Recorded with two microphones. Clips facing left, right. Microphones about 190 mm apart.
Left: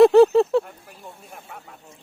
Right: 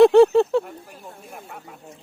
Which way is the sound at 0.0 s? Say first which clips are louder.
Even; centre (ahead or behind).